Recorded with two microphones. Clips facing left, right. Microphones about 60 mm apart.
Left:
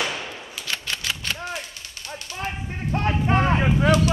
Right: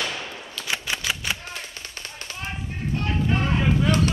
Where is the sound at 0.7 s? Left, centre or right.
Centre.